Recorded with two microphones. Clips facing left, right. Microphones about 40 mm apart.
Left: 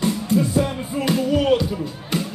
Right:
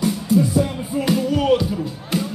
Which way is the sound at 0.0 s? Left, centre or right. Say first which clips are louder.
Right 2 dB; left.